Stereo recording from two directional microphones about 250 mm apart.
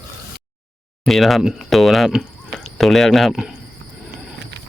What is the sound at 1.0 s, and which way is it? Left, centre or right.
Speech, centre.